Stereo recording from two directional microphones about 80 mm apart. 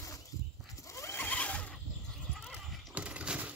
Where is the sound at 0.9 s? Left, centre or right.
Left.